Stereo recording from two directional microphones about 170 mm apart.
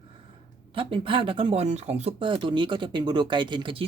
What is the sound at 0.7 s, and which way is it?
Speech, 30° right (ahead or behind).